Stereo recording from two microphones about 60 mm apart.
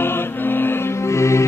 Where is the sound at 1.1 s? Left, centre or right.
Left.